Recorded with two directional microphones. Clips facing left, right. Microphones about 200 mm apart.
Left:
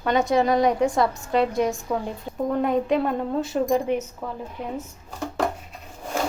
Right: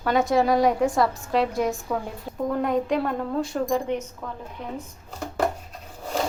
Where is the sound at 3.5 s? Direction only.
20° left (ahead or behind).